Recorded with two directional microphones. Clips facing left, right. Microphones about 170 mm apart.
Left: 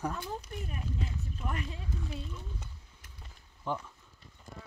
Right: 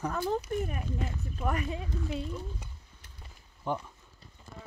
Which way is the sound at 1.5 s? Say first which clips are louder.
Right 7 dB; 70° right (ahead or behind).